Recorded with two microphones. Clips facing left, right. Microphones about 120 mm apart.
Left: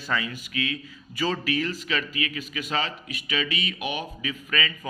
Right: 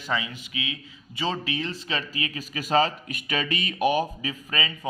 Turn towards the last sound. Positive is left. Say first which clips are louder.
# left 1 dB
turn(degrees=-30)  # may be behind; listen again after turning